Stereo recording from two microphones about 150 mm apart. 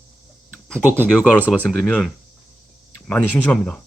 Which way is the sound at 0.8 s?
10° right (ahead or behind).